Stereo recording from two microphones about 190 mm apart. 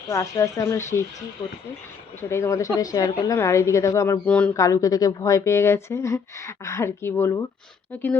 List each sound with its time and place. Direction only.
0.1 s a woman's voice: 15° left (ahead or behind)
2.3 s a woman's voice: 15° left (ahead or behind)
4.6 s a woman's voice: 15° left (ahead or behind)